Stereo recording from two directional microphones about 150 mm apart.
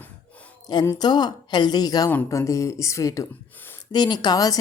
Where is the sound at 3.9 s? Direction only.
30° left (ahead or behind).